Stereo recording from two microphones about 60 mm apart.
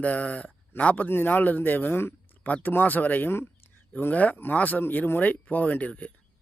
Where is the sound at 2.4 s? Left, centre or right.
Left.